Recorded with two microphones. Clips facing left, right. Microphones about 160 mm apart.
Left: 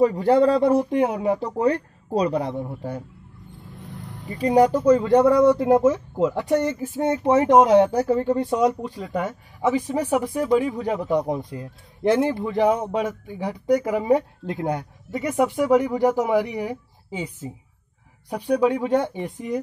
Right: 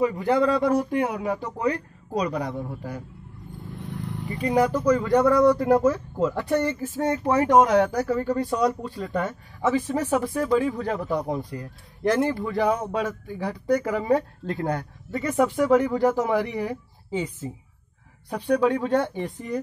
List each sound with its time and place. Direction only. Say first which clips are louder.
0.0 s speech: left 4 dB; 35° left (ahead or behind)
4.4 s speech: left 5 dB; 35° left (ahead or behind); by 19.6 s 15° left (ahead or behind)